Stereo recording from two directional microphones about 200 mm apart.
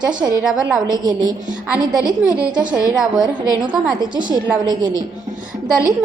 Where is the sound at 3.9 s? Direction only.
20° right (ahead or behind).